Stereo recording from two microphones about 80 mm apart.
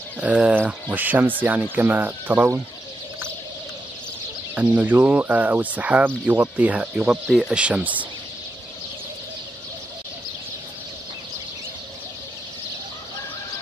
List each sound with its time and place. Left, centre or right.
0.2 s speech: centre
4.6 s speech: centre
7.1 s speech: centre
7.5 s speech: centre